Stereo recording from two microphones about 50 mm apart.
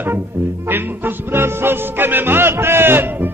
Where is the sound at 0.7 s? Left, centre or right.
Right.